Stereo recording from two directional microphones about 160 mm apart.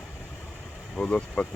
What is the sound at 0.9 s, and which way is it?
Speech, 5° left (ahead or behind).